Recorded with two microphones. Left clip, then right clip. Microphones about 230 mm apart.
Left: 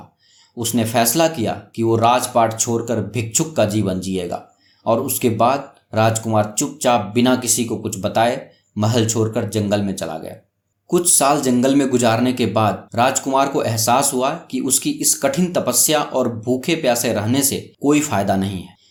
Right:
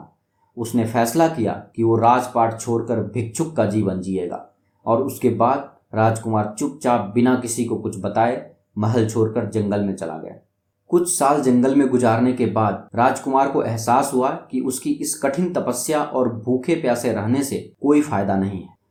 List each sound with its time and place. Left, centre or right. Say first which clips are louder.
0.6 s speech: left 2 dB; left
11.2 s speech: left 1 dB; left